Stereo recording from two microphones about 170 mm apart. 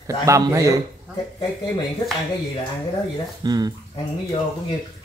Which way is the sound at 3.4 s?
25° right (ahead or behind).